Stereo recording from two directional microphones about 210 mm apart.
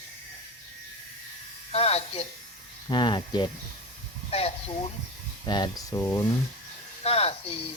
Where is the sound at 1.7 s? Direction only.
30° left (ahead or behind).